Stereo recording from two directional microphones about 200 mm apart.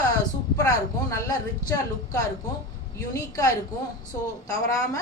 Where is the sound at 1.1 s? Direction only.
15° left (ahead or behind).